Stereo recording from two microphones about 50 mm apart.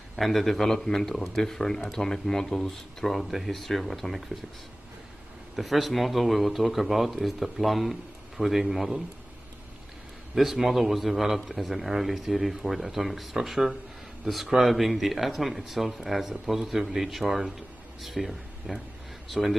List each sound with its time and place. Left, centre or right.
0.2 s speech: centre
5.6 s a man's voice: centre
10.3 s a man's voice: centre